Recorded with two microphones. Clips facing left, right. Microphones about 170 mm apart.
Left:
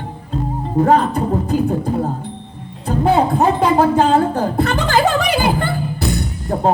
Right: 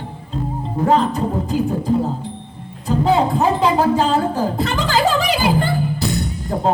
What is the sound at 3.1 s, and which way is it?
Speech, 55° left (ahead or behind).